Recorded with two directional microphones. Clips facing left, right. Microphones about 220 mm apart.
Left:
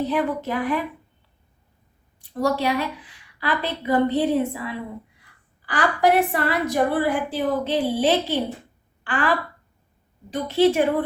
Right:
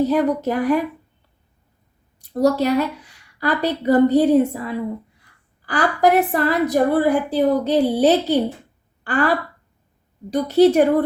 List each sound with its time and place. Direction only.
0.0 s a woman's voice: 40° right (ahead or behind)
2.1 s a woman's voice: 40° right (ahead or behind)